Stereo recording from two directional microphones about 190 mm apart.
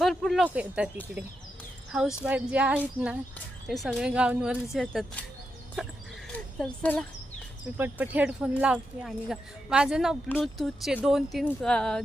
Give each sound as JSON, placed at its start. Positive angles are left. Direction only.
{"t": 0.0, "sound": "speech", "side_deg": 0}
{"t": 2.2, "sound": "speech", "side_deg": -5}
{"t": 7.8, "sound": "speech", "side_deg": -10}